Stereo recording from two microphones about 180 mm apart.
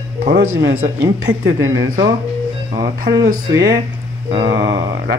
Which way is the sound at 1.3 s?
20° right (ahead or behind).